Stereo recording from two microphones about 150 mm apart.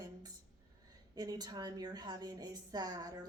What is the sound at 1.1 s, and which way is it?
A woman's voice, 25° right (ahead or behind).